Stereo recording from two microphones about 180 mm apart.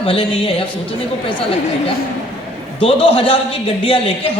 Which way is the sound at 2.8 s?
30° left (ahead or behind).